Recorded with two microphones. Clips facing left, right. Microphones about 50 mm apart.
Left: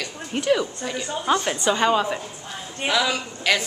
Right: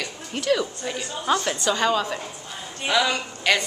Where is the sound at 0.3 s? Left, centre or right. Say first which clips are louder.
Left 2 dB; centre.